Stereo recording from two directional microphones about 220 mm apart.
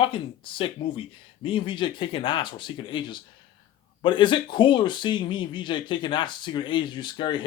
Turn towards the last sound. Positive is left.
turn(degrees=20)  # may be behind; listen again after turning